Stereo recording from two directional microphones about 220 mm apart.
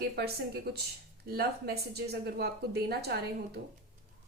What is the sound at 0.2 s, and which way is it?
A woman's voice, 45° right (ahead or behind).